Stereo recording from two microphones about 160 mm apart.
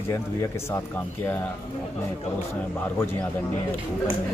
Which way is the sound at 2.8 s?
10° left (ahead or behind).